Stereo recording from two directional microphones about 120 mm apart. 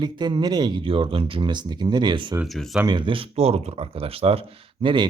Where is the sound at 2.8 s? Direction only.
40° right (ahead or behind).